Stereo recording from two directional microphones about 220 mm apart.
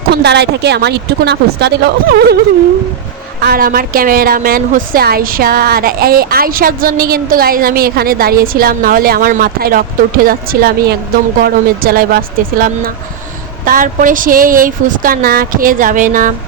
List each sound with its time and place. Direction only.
0.1 s speech: 50° right (ahead or behind)
3.4 s a woman's voice: 40° right (ahead or behind)